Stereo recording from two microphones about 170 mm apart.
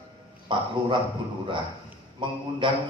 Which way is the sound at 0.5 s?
30° right (ahead or behind).